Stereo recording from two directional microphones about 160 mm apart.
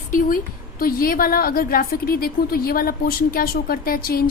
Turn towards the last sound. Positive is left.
turn(degrees=70)  # may be behind; listen again after turning